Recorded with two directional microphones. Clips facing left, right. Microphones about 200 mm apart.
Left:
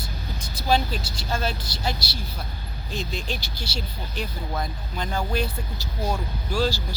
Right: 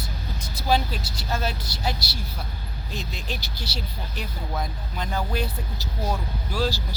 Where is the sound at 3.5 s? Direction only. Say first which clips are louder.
Left 1 dB; 40° right (ahead or behind).